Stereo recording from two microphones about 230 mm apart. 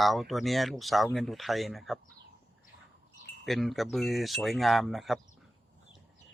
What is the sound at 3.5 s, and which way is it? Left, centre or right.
Speech, centre.